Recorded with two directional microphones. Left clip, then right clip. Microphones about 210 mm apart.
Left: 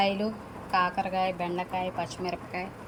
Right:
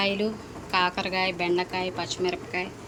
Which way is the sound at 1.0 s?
40° right (ahead or behind).